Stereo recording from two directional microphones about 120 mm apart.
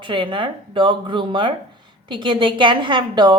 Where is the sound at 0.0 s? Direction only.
45° right (ahead or behind).